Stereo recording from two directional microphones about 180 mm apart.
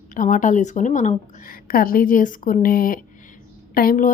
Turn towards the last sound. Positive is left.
turn(degrees=50)  # may be behind; listen again after turning